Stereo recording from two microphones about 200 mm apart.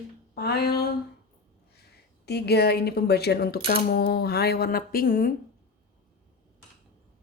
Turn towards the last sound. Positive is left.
turn(degrees=45)  # may be behind; listen again after turning